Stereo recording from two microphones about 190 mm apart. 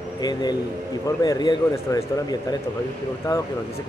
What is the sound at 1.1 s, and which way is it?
Speech, 20° left (ahead or behind).